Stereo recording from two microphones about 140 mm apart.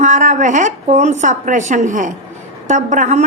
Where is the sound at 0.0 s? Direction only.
65° right (ahead or behind).